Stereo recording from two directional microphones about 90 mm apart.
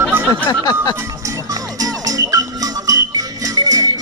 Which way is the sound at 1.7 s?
40° right (ahead or behind).